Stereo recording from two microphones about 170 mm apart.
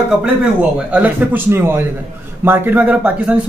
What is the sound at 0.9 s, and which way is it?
A man's voice, 10° right (ahead or behind).